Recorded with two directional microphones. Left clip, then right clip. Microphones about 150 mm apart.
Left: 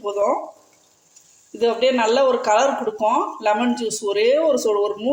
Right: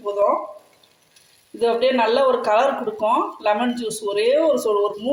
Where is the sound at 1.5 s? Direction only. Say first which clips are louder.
Even; 5° left (ahead or behind).